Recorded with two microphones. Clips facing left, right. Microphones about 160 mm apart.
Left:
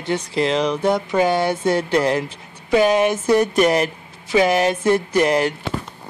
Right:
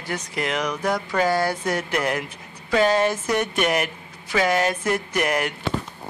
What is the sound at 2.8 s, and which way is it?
Speech, 15° left (ahead or behind).